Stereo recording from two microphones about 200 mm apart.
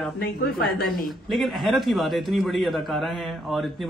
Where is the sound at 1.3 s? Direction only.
Centre (ahead or behind).